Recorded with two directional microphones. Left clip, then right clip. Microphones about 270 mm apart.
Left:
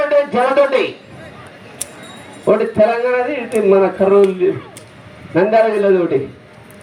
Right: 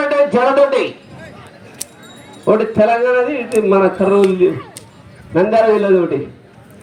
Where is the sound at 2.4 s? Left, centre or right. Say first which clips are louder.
Even; right.